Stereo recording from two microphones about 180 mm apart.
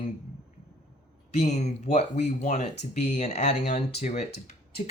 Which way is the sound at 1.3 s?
40° left (ahead or behind).